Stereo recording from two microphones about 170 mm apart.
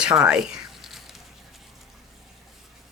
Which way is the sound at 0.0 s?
5° right (ahead or behind).